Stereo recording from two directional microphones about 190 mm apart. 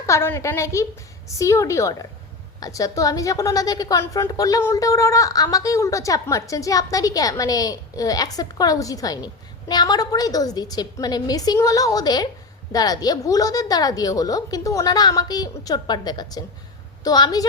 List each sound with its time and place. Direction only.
0.0 s a woman's voice: 15° left (ahead or behind)